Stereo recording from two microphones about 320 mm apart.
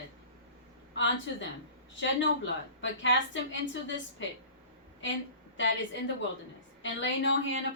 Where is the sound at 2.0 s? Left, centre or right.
Left.